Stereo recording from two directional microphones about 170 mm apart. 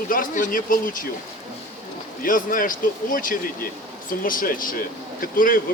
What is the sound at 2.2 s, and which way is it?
Speech, 55° left (ahead or behind).